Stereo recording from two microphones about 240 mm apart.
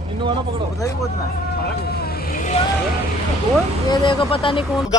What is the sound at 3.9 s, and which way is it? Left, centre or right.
Speech, left.